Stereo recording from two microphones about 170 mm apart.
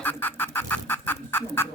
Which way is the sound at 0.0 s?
10° left (ahead or behind).